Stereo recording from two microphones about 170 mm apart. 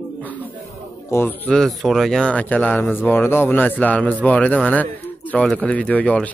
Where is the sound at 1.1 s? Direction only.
15° left (ahead or behind).